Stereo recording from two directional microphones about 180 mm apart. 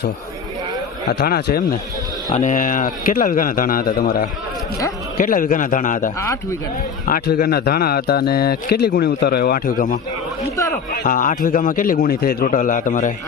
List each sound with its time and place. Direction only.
1.0 s a man's voice: 60° left (ahead or behind)
2.3 s a man's voice: 40° left (ahead or behind)
7.1 s a man's voice: 55° left (ahead or behind)